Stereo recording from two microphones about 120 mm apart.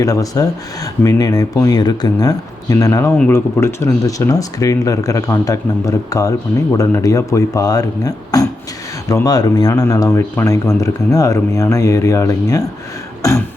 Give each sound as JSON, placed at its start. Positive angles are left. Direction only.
{"t": 0.0, "sound": "speech", "side_deg": 30}